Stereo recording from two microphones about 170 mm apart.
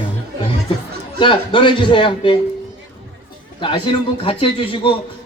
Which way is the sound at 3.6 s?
30° left (ahead or behind).